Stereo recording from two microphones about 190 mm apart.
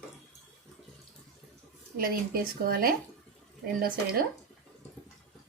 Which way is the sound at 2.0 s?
50° right (ahead or behind).